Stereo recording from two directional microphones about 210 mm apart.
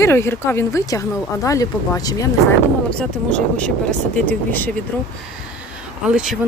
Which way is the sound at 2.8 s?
5° left (ahead or behind).